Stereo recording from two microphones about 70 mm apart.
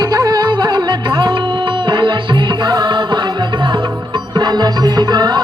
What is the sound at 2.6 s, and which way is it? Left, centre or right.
Music, right.